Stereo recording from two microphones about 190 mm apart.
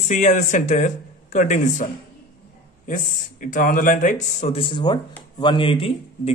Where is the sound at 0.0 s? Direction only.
40° left (ahead or behind).